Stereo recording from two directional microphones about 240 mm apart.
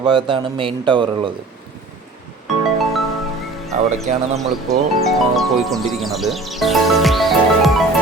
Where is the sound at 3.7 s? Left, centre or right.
Right.